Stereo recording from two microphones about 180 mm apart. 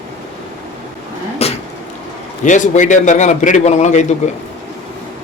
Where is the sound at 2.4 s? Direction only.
45° left (ahead or behind).